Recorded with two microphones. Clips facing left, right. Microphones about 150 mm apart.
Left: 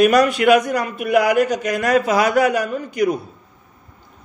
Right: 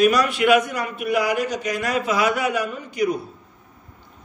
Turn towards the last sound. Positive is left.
turn(degrees=50)  # may be behind; listen again after turning